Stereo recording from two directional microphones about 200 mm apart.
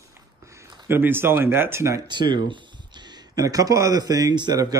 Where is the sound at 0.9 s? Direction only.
10° right (ahead or behind).